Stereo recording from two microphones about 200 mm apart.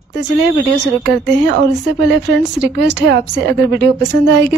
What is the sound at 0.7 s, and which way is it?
Speech, 60° right (ahead or behind).